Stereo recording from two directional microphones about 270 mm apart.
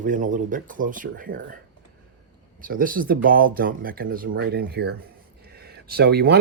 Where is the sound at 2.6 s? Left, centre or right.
Right.